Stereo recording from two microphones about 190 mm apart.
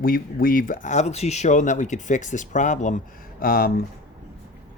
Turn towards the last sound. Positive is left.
turn(degrees=50)  # may be behind; listen again after turning